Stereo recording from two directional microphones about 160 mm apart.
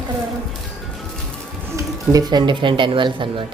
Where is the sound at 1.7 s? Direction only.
20° right (ahead or behind).